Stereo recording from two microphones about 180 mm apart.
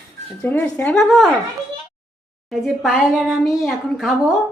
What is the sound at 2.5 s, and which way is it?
A woman's voice, centre (ahead or behind).